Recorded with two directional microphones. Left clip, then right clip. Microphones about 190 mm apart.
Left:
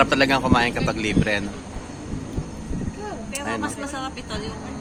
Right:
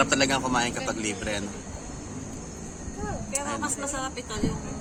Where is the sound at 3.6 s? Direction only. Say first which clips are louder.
Left 2 dB; 70° right (ahead or behind).